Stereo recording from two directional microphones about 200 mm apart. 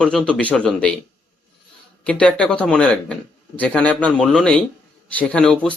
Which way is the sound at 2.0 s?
5° left (ahead or behind).